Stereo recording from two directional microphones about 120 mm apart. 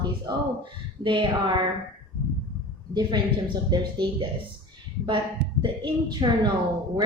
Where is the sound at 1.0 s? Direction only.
45° right (ahead or behind).